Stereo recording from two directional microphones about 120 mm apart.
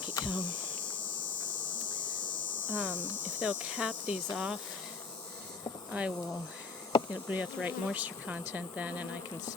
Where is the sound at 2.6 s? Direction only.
15° right (ahead or behind).